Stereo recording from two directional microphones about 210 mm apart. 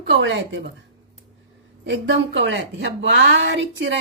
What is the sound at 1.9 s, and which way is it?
A woman's voice, 60° right (ahead or behind).